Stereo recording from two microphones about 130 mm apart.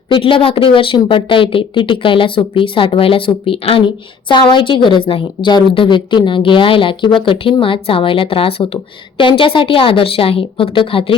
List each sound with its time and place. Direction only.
0.1 s a woman's voice: 40° left (ahead or behind)